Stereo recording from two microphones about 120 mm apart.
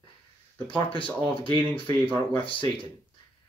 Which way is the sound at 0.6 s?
45° left (ahead or behind).